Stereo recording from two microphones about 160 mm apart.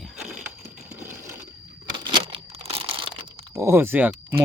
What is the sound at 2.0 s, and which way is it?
Crumpling, 30° right (ahead or behind).